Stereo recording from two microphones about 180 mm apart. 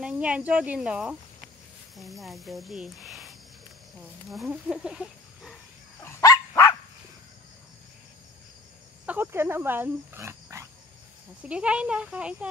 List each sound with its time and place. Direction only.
0.0 s speech: 5° right (ahead or behind)
5.9 s dog: 15° left (ahead or behind)
9.0 s speech: 10° right (ahead or behind)